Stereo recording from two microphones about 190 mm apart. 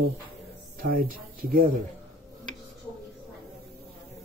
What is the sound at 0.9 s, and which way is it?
Speech, 50° right (ahead or behind).